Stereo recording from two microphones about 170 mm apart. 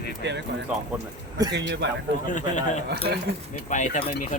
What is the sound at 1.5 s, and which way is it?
Speech, 90° right.